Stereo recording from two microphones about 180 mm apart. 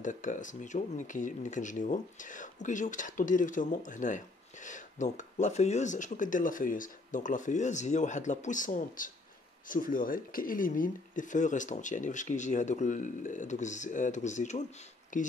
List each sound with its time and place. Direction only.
0.0 s speech: 45° left (ahead or behind)